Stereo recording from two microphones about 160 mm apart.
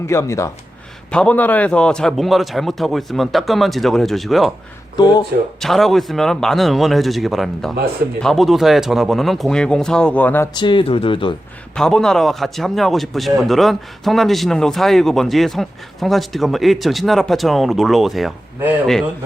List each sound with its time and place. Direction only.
0.1 s speech: 20° left (ahead or behind)
1.1 s speech: 5° left (ahead or behind)
4.9 s speech: 25° left (ahead or behind)
5.5 s speech: centre (ahead or behind)
10.5 s speech: 30° left (ahead or behind)
11.7 s speech: 5° left (ahead or behind)